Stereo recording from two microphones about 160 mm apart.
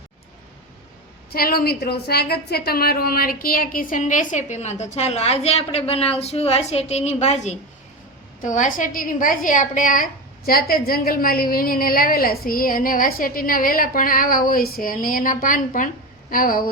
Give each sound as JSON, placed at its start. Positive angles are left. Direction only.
{"t": 1.3, "sound": "a woman's voice", "side_deg": 70}